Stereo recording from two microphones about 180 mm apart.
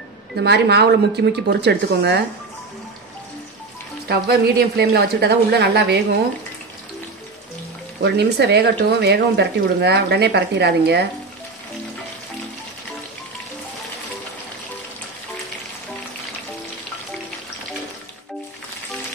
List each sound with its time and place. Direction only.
0.4 s speech: 70° right (ahead or behind)
4.1 s speech: 65° right (ahead or behind)
8.0 s speech: 70° right (ahead or behind)